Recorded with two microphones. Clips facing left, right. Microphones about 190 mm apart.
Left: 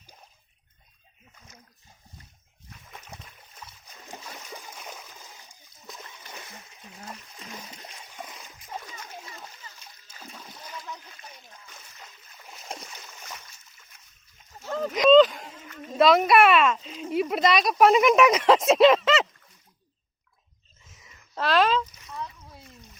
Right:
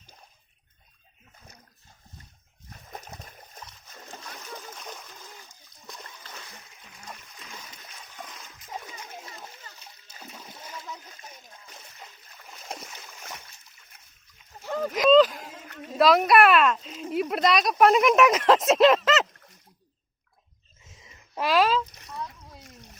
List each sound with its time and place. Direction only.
2.6 s splash: 40° right (ahead or behind)
4.1 s splash: 10° left (ahead or behind)
7.3 s splash: 35° left (ahead or behind)
8.0 s splash: 15° left (ahead or behind)
8.8 s splash: 15° right (ahead or behind)
10.2 s splash: 5° right (ahead or behind)
11.3 s splash: 35° right (ahead or behind)
12.5 s boat: centre (ahead or behind)
14.6 s a sound: 5° right (ahead or behind)
15.5 s a sound: 60° right (ahead or behind)
15.9 s speech: centre (ahead or behind)
20.9 s a sound: 20° right (ahead or behind)
21.4 s a sound: 5° right (ahead or behind)
22.6 s splash: 75° right (ahead or behind)